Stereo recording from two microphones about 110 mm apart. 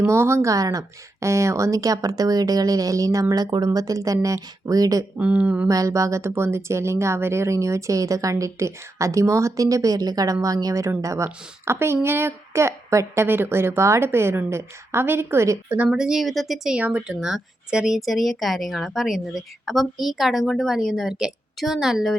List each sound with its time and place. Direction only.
0.0 s speech: 20° right (ahead or behind)
5.1 s speech: 10° right (ahead or behind)
5.6 s a woman's voice: 30° right (ahead or behind)
15.8 s speech: 5° right (ahead or behind)